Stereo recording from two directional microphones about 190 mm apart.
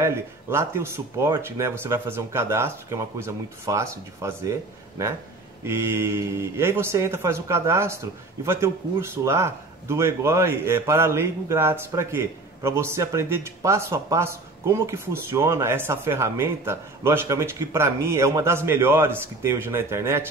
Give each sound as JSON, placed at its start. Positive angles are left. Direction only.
{"t": 0.0, "sound": "speech", "side_deg": -15}